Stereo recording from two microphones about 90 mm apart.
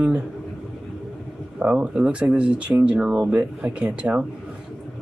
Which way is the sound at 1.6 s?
15° right (ahead or behind).